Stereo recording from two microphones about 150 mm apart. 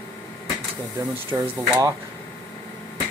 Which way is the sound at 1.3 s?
15° right (ahead or behind).